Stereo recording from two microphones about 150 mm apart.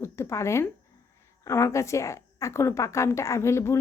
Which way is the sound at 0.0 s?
20° left (ahead or behind).